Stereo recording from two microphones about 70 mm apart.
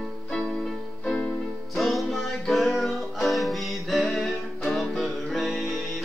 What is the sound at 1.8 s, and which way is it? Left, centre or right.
Music, centre.